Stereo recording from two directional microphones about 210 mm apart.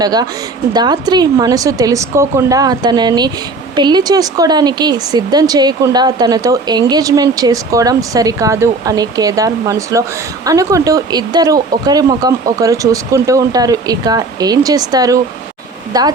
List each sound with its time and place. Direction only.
0.0 s speech: 20° right (ahead or behind)